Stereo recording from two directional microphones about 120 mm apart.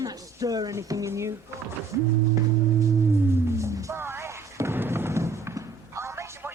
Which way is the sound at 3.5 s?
25° right (ahead or behind).